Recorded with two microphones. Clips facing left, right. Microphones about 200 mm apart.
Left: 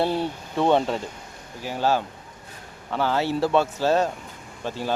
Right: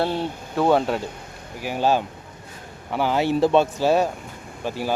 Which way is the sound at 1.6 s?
15° right (ahead or behind).